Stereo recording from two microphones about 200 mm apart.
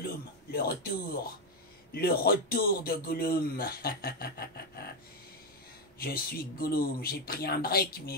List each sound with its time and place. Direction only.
0.0 s a man's voice: 50° left (ahead or behind)
5.9 s speech: 50° left (ahead or behind)